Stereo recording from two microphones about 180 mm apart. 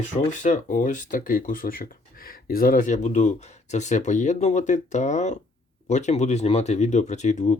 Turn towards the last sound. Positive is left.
turn(degrees=40)  # may be behind; listen again after turning